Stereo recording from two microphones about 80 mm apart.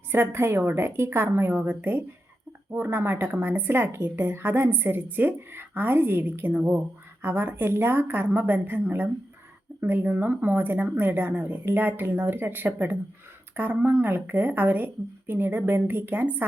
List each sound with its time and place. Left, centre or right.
0.1 s a woman's voice: right